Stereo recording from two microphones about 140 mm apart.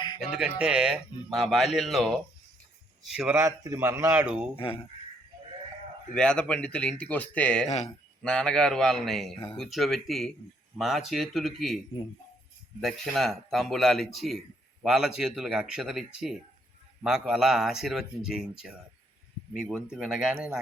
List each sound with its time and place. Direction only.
0.2 s speech: 5° right (ahead or behind)
3.3 s a man's voice: 20° right (ahead or behind)
4.5 s speech: 40° left (ahead or behind)
6.1 s speech: 5° left (ahead or behind)
12.8 s speech: centre (ahead or behind)